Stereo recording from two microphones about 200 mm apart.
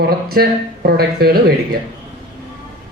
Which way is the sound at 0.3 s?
50° right (ahead or behind).